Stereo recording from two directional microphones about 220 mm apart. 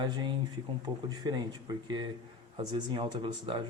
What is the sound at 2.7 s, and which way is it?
Speech, 20° right (ahead or behind).